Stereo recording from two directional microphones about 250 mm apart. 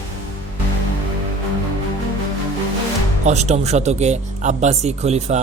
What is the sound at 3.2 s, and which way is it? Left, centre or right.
Speech, right.